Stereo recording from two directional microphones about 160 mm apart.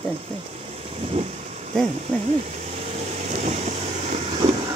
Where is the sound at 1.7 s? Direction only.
5° left (ahead or behind).